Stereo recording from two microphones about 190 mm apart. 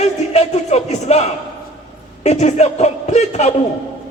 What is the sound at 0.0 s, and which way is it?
Music, 35° left (ahead or behind).